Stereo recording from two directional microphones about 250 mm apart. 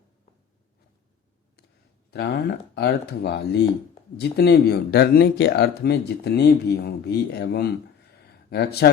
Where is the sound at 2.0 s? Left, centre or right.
Left.